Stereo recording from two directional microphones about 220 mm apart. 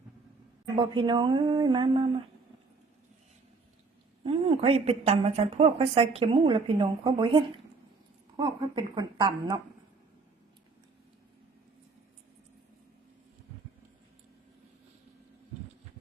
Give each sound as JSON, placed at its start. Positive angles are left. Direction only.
{"t": 0.8, "sound": "a woman's voice", "side_deg": -20}
{"t": 4.2, "sound": "a woman's voice", "side_deg": -25}